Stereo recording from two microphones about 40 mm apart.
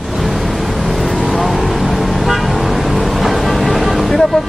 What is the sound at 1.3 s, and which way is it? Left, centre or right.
Vehicle, centre.